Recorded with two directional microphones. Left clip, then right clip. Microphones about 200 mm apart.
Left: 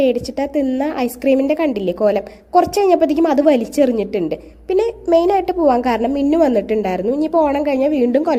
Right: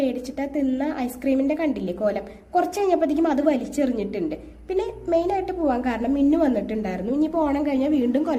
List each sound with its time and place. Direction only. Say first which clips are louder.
0.0 s a woman's voice: left 9 dB; 40° left (ahead or behind)